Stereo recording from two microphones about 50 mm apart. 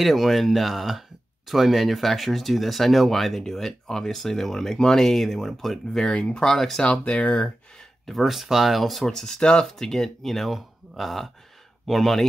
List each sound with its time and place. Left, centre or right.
0.0 s speech: centre
6.1 s speech: centre
6.8 s speech: left
8.1 s speech: centre
9.0 s speech: centre